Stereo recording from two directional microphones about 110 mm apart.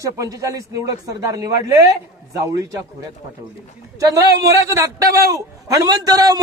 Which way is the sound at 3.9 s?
30° right (ahead or behind).